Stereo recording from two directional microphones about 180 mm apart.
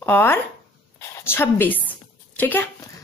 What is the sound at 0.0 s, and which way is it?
Speech, 10° left (ahead or behind).